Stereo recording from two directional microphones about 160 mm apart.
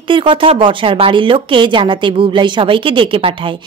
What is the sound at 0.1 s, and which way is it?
Speech, 30° right (ahead or behind).